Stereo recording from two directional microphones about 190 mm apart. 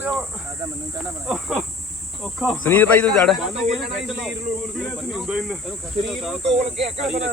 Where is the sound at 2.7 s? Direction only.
10° left (ahead or behind).